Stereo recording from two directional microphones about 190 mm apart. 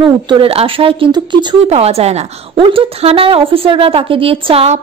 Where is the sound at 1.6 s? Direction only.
35° right (ahead or behind).